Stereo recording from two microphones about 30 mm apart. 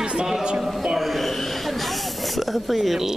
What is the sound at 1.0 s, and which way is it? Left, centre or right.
Snake, centre.